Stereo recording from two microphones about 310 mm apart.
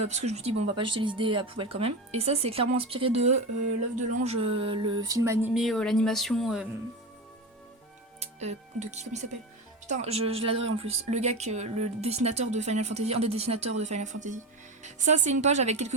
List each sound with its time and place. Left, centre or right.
0.0 s speech: right; by 6.7 s centre
8.2 s speech: right